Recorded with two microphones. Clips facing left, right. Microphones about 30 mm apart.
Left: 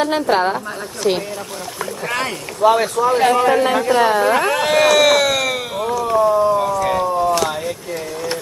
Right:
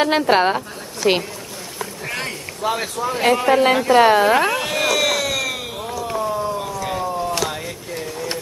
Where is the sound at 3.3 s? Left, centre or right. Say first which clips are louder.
Left 2 dB; centre.